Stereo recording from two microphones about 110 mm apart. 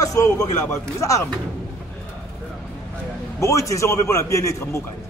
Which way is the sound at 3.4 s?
25° left (ahead or behind).